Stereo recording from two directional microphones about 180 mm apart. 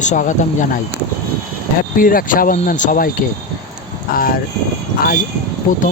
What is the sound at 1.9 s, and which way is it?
Speech, 50° left (ahead or behind).